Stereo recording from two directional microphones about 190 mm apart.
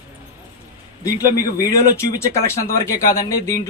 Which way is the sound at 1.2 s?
20° left (ahead or behind).